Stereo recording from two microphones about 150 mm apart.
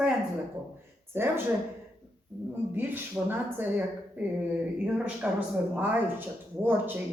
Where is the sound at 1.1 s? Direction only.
15° right (ahead or behind).